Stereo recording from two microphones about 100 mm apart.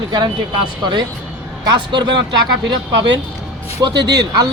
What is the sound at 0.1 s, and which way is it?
Speech, 45° right (ahead or behind).